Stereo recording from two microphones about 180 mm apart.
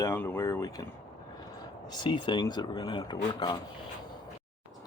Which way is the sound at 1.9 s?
25° left (ahead or behind).